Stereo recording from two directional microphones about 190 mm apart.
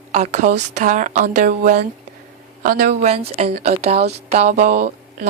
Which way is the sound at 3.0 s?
35° right (ahead or behind).